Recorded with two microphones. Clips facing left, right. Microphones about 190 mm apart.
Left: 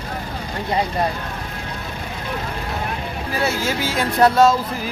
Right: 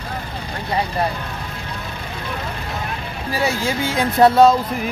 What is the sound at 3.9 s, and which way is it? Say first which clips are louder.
Speech: right 3 dB; 20° right (ahead or behind).